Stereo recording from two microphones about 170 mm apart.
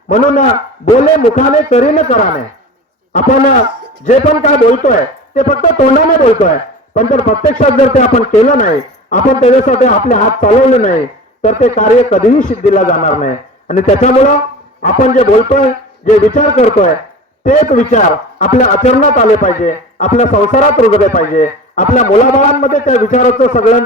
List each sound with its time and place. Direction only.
0.1 s a man's voice: 50° left (ahead or behind)